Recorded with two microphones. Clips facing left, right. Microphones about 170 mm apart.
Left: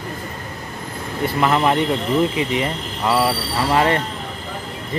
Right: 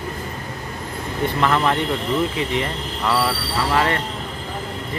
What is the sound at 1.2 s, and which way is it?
Speech, 10° left (ahead or behind).